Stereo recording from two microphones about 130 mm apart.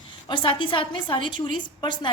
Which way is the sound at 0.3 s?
40° left (ahead or behind).